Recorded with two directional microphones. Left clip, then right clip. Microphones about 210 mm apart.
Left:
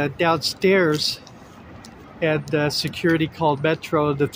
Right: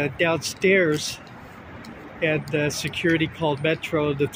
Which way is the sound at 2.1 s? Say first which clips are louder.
Left 2 dB; 20° left (ahead or behind).